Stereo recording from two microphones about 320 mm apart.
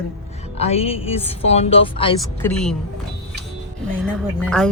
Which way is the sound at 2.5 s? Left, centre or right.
Centre.